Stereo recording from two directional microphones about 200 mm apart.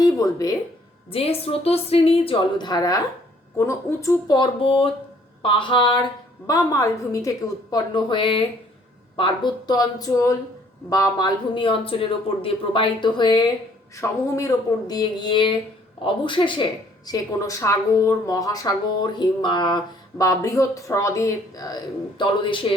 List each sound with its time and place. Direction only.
0.0 s speech: 15° left (ahead or behind)
1.1 s a woman's voice: 30° left (ahead or behind)